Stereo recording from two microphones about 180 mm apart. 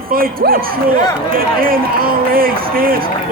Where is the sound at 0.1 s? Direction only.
55° right (ahead or behind).